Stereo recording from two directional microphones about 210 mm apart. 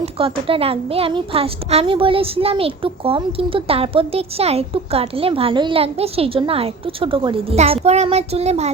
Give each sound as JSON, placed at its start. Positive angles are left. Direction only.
{"t": 0.0, "sound": "a woman's voice", "side_deg": -25}